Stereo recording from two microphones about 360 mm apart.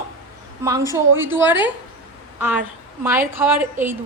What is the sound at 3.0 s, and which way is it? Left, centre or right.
Speech, centre.